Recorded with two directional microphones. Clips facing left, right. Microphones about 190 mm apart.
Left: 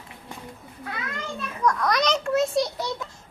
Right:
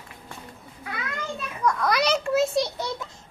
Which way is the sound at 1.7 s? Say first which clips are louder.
Even; 5° right (ahead or behind).